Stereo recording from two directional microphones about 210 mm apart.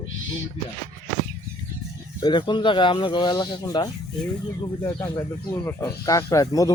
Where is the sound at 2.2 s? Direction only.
20° left (ahead or behind).